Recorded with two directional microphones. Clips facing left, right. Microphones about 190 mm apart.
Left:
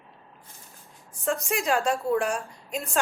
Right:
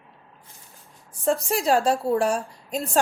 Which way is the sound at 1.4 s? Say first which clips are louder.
Right 3 dB; 35° right (ahead or behind).